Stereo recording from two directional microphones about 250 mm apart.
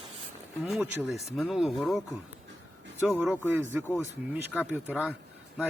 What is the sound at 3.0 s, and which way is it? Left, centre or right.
Speech, centre.